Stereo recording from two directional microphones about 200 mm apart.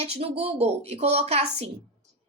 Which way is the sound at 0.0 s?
30° right (ahead or behind).